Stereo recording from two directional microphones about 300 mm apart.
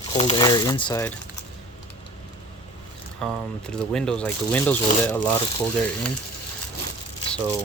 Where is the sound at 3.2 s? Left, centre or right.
Centre.